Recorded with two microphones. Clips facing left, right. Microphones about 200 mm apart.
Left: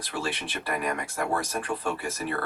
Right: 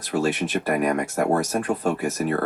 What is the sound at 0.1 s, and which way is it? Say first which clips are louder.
Speech: right 10 dB; 40° right (ahead or behind).